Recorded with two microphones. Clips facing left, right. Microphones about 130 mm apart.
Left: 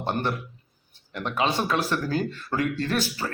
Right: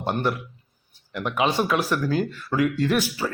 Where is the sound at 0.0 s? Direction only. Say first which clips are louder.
Right 2 dB; 10° right (ahead or behind).